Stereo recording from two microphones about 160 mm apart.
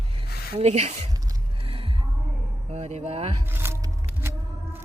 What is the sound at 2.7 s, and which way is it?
Speech, 45° right (ahead or behind).